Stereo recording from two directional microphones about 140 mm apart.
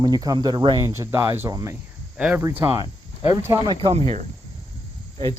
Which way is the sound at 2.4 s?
20° right (ahead or behind).